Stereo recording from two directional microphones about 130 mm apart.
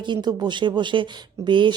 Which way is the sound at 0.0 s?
35° right (ahead or behind).